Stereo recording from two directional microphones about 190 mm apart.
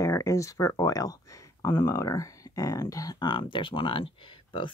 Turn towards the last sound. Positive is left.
turn(degrees=25)  # may be behind; listen again after turning